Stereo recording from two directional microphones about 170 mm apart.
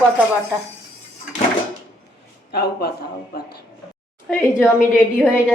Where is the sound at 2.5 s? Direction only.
70° left (ahead or behind).